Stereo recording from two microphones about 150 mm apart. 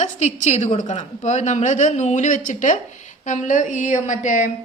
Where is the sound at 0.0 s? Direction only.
50° left (ahead or behind).